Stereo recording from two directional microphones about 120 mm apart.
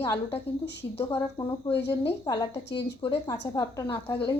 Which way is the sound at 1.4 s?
35° left (ahead or behind).